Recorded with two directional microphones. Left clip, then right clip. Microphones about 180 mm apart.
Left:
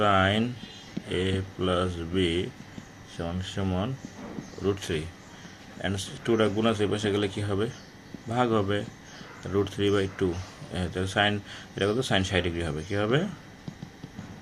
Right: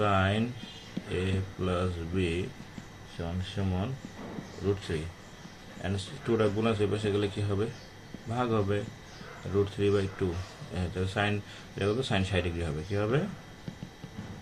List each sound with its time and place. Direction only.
0.0 s speech: 40° left (ahead or behind)
4.9 s speech: 40° left (ahead or behind)